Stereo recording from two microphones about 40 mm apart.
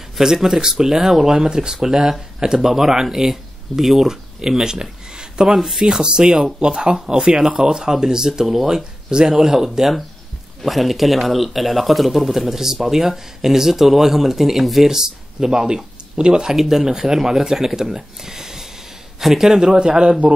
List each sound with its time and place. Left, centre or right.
0.2 s speech: centre
5.1 s a sound: centre
5.6 s speech: centre
16.5 s speech: centre; by 20.2 s right